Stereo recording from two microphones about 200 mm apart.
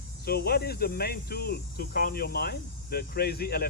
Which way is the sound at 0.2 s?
50° left (ahead or behind).